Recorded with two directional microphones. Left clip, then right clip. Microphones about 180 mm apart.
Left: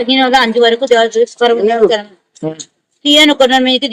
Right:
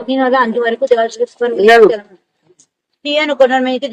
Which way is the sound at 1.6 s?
45° right (ahead or behind).